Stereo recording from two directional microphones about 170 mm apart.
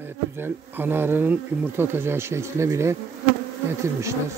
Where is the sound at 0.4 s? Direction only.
10° right (ahead or behind).